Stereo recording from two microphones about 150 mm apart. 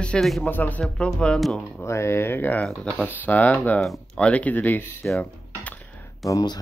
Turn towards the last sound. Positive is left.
turn(degrees=25)  # may be behind; listen again after turning